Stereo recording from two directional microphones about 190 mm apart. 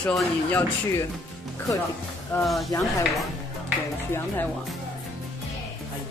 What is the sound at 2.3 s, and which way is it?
Speech, centre (ahead or behind).